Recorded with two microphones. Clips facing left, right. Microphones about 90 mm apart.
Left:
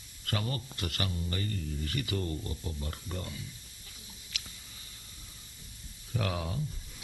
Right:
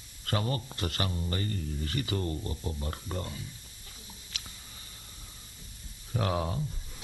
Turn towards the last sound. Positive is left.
turn(degrees=-35)  # may be behind; listen again after turning